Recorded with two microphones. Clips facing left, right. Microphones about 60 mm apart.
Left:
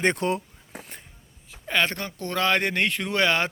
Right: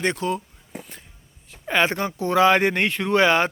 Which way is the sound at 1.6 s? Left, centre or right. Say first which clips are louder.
Right 4 dB; centre.